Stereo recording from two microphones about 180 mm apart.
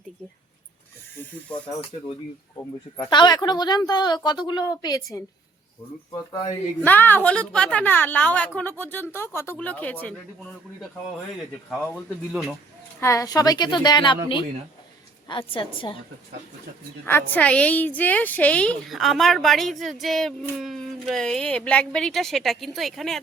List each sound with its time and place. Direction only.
1.5 s a woman's voice: 5° left (ahead or behind)
3.0 s a woman's voice: 25° left (ahead or behind)
6.8 s a woman's voice: 10° left (ahead or behind)
12.0 s a woman's voice: 5° right (ahead or behind)
13.0 s a woman's voice: 15° left (ahead or behind)
15.3 s a woman's voice: 30° left (ahead or behind)
17.1 s a woman's voice: 10° left (ahead or behind)